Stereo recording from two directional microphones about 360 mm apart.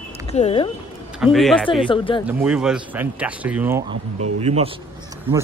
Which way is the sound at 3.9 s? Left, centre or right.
Right.